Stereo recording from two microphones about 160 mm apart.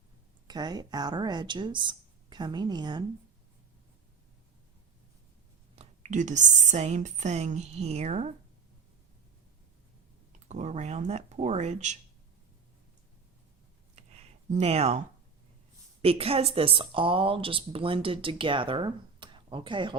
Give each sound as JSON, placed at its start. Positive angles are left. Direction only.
{"t": 0.4, "sound": "speech", "side_deg": -25}
{"t": 5.7, "sound": "speech", "side_deg": -45}
{"t": 10.5, "sound": "speech", "side_deg": -45}
{"t": 14.5, "sound": "a woman's voice", "side_deg": -40}